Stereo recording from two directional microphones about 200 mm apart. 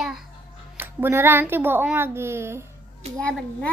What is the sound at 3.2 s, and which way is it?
Speech, 5° left (ahead or behind).